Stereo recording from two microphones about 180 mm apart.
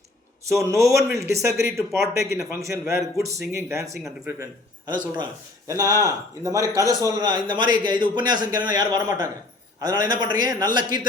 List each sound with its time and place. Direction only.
0.6 s speech: 15° right (ahead or behind)
4.9 s speech: 25° right (ahead or behind)